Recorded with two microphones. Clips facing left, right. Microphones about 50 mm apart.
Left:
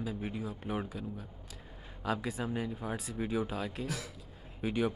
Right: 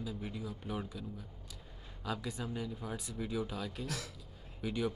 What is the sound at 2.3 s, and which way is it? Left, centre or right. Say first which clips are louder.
Speech: left 5 dB; centre.